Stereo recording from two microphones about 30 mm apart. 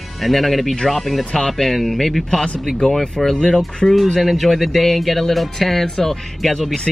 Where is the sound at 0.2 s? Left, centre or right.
Centre.